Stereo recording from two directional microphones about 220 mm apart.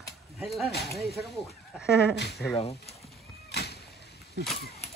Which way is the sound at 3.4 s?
50° left (ahead or behind).